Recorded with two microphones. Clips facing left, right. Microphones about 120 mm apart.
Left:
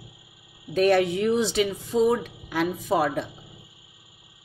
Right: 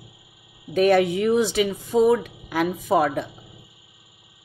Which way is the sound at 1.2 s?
50° right (ahead or behind).